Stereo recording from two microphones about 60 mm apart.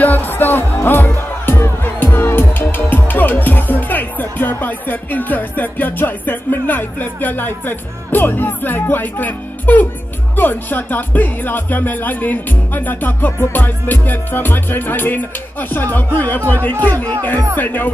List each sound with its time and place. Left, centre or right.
0.0 s music: left
8.9 s speech: left